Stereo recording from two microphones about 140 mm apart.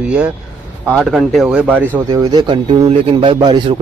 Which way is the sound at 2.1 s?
25° right (ahead or behind).